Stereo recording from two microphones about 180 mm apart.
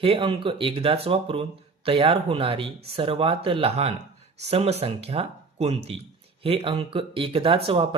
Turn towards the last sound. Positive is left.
turn(degrees=-30)  # may be behind; listen again after turning